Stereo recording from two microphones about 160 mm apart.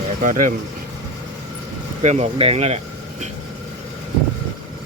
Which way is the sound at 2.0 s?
45° right (ahead or behind).